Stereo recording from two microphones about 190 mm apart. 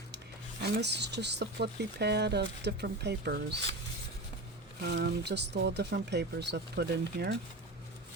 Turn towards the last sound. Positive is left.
turn(degrees=-60)  # may be behind; listen again after turning